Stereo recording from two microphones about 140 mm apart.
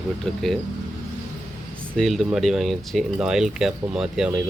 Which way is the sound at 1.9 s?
Centre (ahead or behind).